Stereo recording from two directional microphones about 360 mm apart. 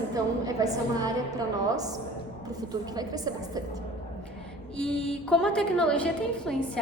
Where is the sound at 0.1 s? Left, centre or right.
Centre.